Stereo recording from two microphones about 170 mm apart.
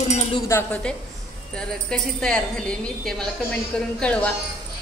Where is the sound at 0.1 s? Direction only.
40° left (ahead or behind).